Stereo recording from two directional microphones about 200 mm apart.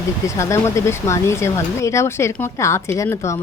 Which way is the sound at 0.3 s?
15° left (ahead or behind).